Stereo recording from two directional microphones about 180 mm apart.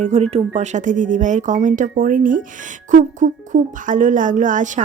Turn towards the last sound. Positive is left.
turn(degrees=-45)  # may be behind; listen again after turning